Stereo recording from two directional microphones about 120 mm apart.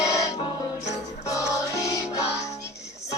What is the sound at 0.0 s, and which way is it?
Music, 25° left (ahead or behind).